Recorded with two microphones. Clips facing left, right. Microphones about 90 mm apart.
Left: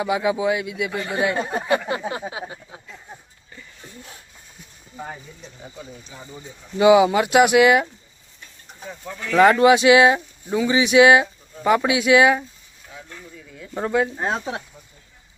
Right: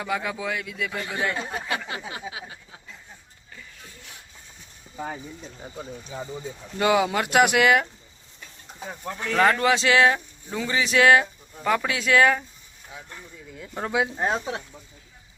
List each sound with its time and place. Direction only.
0.0 s speech: 15° left (ahead or behind)
1.5 s a sound: 30° left (ahead or behind)
6.7 s speech: 10° left (ahead or behind)
9.4 s speech: 20° left (ahead or behind)
13.1 s a sound: 20° right (ahead or behind)
13.7 s speech: centre (ahead or behind)
14.2 s speech: 15° left (ahead or behind)